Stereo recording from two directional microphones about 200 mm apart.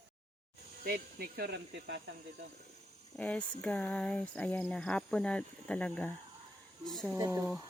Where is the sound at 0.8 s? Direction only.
50° right (ahead or behind).